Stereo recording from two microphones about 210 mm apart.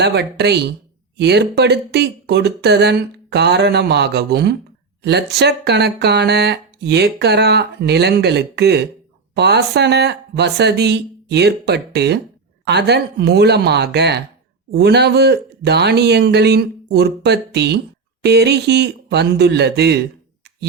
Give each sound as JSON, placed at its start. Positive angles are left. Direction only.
{"t": 0.0, "sound": "speech", "side_deg": -50}